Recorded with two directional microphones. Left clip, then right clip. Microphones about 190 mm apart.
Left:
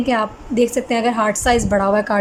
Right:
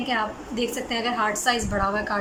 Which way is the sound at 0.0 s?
35° left (ahead or behind).